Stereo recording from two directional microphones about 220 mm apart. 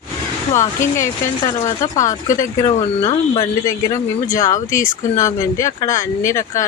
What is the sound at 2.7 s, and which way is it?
Speech, 25° left (ahead or behind).